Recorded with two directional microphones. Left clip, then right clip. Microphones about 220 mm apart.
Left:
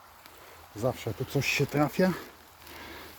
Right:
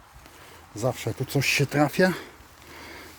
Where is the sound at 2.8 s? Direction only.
5° right (ahead or behind).